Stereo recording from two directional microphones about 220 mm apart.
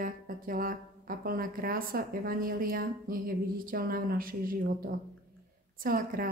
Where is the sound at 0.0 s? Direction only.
40° right (ahead or behind).